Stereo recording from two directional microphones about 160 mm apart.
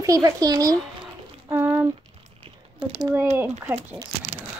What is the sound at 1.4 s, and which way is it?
Speech, 15° right (ahead or behind).